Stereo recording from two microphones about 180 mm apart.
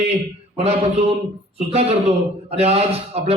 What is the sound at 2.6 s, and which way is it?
Speech, 35° right (ahead or behind).